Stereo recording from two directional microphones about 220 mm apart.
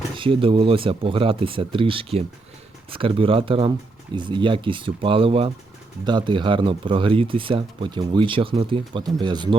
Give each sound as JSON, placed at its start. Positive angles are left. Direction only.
{"t": 0.2, "sound": "speech", "side_deg": -25}